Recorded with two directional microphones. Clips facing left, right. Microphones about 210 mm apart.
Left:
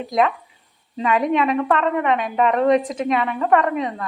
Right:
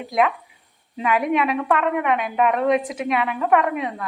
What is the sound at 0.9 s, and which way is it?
A woman's voice, 5° right (ahead or behind).